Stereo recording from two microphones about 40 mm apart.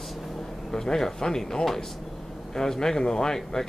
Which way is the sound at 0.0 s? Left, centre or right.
Centre.